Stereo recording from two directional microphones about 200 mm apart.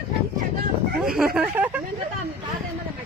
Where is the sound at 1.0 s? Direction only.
Centre (ahead or behind).